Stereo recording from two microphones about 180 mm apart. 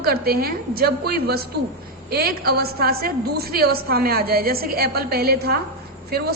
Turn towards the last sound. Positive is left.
turn(degrees=-60)  # may be behind; listen again after turning